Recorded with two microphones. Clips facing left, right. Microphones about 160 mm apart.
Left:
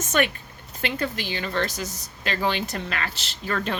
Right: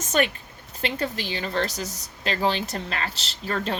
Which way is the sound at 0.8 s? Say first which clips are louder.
Even; 35° right (ahead or behind).